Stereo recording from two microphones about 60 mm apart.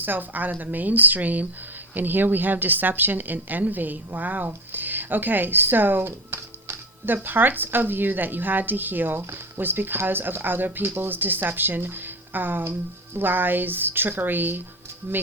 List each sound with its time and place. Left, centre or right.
0.0 s a woman's voice: right